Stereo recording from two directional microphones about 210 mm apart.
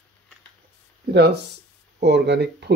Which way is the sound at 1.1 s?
50° right (ahead or behind).